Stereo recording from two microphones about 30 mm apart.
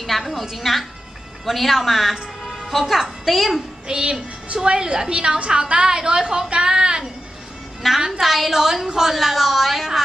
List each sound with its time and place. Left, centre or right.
0.0 s music: centre
0.5 s a woman's voice: centre
3.8 s a woman's voice: right
6.6 s a sound: right
7.8 s a woman's voice: centre